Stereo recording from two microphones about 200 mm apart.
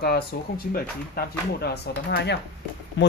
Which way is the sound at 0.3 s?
50° left (ahead or behind).